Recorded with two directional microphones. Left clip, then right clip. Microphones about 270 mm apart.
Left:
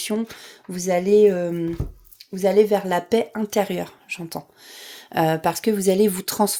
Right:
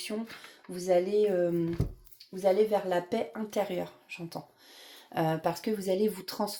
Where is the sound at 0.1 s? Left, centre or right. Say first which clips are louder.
Left 11 dB; left.